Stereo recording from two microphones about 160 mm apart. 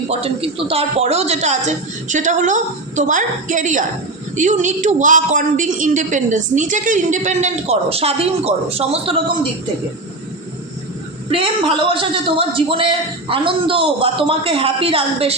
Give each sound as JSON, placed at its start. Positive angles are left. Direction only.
{"t": 0.1, "sound": "a woman's voice", "side_deg": -40}
{"t": 11.8, "sound": "a woman's voice", "side_deg": -35}